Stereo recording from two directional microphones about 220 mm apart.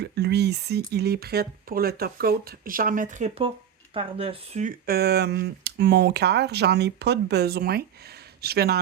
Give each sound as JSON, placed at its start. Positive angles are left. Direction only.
{"t": 0.0, "sound": "speech", "side_deg": -50}
{"t": 4.9, "sound": "speech", "side_deg": -45}